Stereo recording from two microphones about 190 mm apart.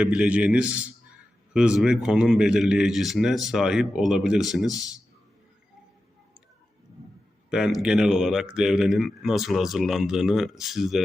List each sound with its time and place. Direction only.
0.0 s a man's voice: 5° right (ahead or behind)
7.5 s speech: 5° right (ahead or behind)